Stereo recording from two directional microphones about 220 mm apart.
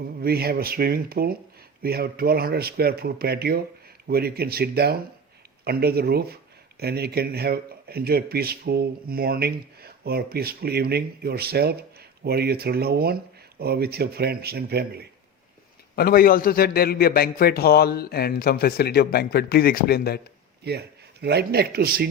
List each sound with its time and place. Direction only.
0.0 s speech: 45° right (ahead or behind)
16.0 s a man's voice: 45° left (ahead or behind)
20.7 s speech: 50° right (ahead or behind)